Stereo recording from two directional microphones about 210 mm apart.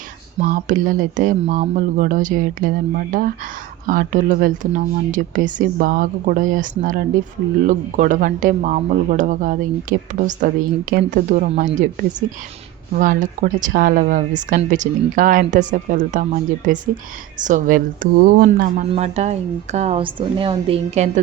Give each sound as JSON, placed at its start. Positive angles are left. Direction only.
{"t": 0.3, "sound": "a woman's voice", "side_deg": -35}
{"t": 13.0, "sound": "a woman's voice", "side_deg": -40}
{"t": 18.9, "sound": "a woman's voice", "side_deg": -30}